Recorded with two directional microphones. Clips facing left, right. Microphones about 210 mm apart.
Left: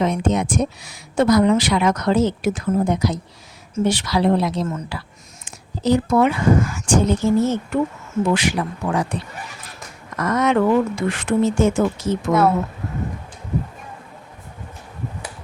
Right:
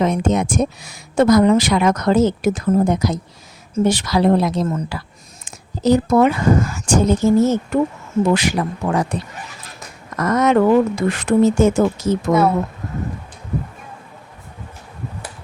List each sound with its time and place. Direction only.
0.0 s a woman's voice: 45° right (ahead or behind)